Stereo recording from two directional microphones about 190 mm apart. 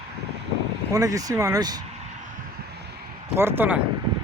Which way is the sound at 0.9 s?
20° right (ahead or behind).